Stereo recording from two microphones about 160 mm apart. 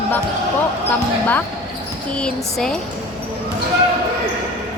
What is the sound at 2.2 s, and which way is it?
Speech, 5° left (ahead or behind).